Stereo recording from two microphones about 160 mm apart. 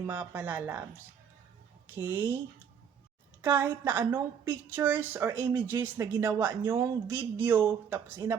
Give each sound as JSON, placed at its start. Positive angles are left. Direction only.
{"t": 0.0, "sound": "a woman's voice", "side_deg": -15}
{"t": 2.0, "sound": "a woman's voice", "side_deg": -15}
{"t": 3.4, "sound": "a woman's voice", "side_deg": -15}